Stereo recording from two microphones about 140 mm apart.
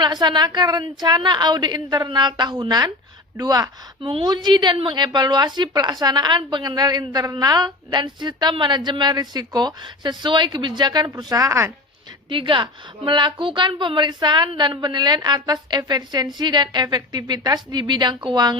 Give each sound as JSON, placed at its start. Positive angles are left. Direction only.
{"t": 0.0, "sound": "a woman's voice", "side_deg": -30}
{"t": 12.3, "sound": "a woman's voice", "side_deg": -35}